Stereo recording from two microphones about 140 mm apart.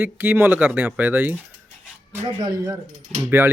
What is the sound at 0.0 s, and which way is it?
A man's voice, 15° right (ahead or behind).